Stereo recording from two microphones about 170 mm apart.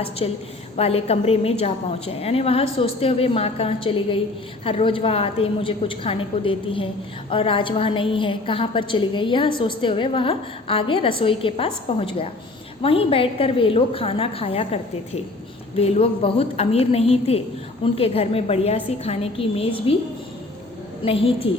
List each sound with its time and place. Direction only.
0.2 s a woman's voice: 30° left (ahead or behind)
21.0 s a woman's voice: 35° left (ahead or behind)